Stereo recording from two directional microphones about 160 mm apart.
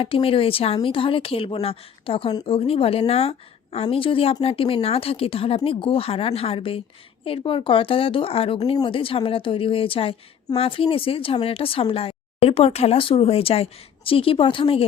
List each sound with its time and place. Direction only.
0.0 s a woman's voice: 35° left (ahead or behind)